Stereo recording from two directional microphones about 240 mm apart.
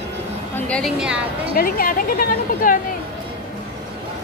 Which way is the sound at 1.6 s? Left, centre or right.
Left.